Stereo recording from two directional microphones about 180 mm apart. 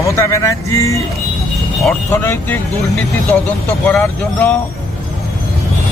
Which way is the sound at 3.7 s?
5° left (ahead or behind).